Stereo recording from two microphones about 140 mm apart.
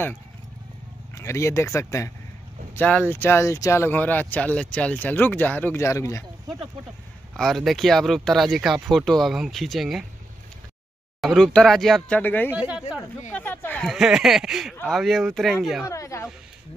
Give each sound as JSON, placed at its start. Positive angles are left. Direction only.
{"t": 1.1, "sound": "speech", "side_deg": 20}
{"t": 2.7, "sound": "speech", "side_deg": 10}
{"t": 7.3, "sound": "speech", "side_deg": 0}
{"t": 11.1, "sound": "speech", "side_deg": 0}
{"t": 12.2, "sound": "speech", "side_deg": 15}
{"t": 12.5, "sound": "speech", "side_deg": -10}
{"t": 13.3, "sound": "speech", "side_deg": 15}
{"t": 13.8, "sound": "speech", "side_deg": -5}
{"t": 15.8, "sound": "speech", "side_deg": 20}